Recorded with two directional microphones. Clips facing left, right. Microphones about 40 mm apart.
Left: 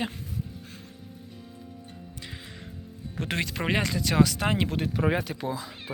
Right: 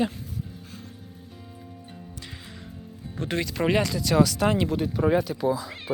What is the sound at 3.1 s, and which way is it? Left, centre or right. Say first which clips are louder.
Speech: right 2 dB; left.